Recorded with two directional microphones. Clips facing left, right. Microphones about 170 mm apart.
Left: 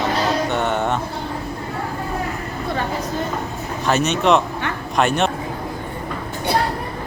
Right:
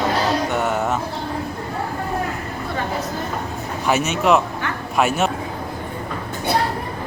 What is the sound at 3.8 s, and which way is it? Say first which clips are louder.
Speech: left 1 dB; 10° right (ahead or behind).